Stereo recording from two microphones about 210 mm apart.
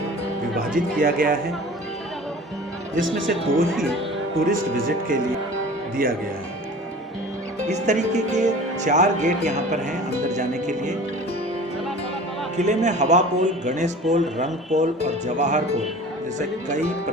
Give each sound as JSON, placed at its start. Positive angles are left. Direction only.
{"t": 0.9, "sound": "speech", "side_deg": -40}
{"t": 3.2, "sound": "speech", "side_deg": 0}
{"t": 4.9, "sound": "speech", "side_deg": -40}
{"t": 7.7, "sound": "speech", "side_deg": -35}
{"t": 12.5, "sound": "speech", "side_deg": -35}